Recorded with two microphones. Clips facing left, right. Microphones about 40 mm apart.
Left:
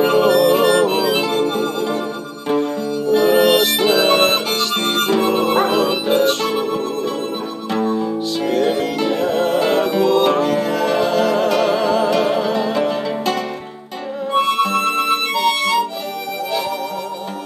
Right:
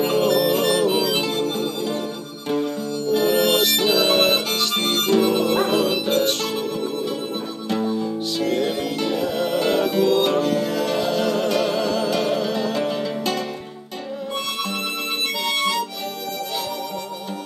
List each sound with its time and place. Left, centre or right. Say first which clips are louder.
0.0 s music: left 5 dB; centre
0.8 s harmonica: left 3 dB; centre
1.6 s music: left 5 dB; left
3.1 s music: left 5 dB; centre
3.6 s harmonica: left 4 dB; centre
6.2 s music: left 6 dB; centre
8.0 s music: left 3 dB; centre
14.4 s music: left 13 dB; left